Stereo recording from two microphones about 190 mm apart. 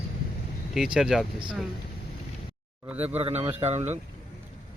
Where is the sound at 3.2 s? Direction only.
30° right (ahead or behind).